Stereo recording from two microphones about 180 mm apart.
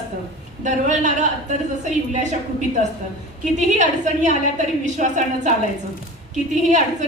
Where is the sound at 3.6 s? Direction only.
40° right (ahead or behind).